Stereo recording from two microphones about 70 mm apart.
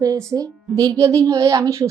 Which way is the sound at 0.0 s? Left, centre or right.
Right.